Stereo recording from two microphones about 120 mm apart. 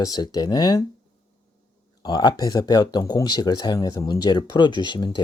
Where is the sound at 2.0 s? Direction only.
35° left (ahead or behind).